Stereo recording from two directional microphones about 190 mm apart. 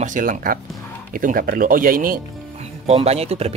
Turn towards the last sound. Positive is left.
turn(degrees=-35)  # may be behind; listen again after turning